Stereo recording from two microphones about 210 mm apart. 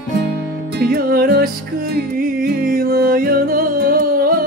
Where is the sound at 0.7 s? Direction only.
45° right (ahead or behind).